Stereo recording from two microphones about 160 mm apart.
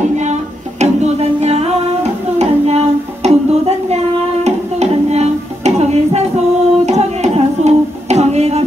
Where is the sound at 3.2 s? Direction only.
40° right (ahead or behind).